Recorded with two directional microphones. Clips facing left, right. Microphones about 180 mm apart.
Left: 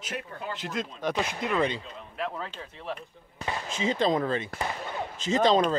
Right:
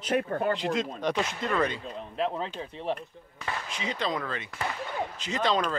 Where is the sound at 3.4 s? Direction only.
25° left (ahead or behind).